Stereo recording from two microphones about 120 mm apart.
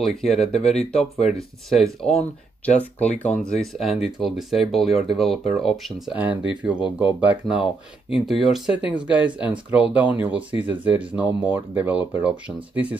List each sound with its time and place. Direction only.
0.0 s speech: centre (ahead or behind)
0.6 s speech: 60° left (ahead or behind)
1.2 s speech: centre (ahead or behind)
3.2 s speech: 10° left (ahead or behind)
6.1 s speech: 10° right (ahead or behind)